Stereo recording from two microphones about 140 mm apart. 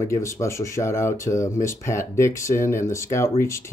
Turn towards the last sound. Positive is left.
turn(degrees=20)  # may be behind; listen again after turning